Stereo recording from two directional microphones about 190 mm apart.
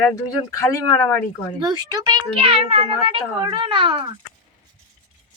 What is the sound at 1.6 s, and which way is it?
A child's voice, 20° right (ahead or behind).